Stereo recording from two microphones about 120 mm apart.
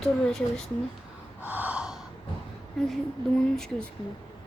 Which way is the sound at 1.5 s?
10° right (ahead or behind).